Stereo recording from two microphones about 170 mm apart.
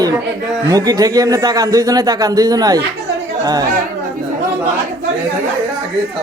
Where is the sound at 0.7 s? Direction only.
20° right (ahead or behind).